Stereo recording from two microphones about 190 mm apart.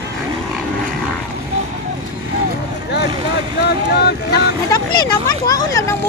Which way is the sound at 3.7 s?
60° left (ahead or behind).